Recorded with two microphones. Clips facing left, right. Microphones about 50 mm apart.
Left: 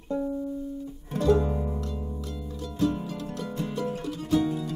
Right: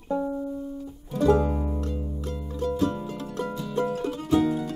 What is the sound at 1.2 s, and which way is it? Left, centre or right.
Music, right.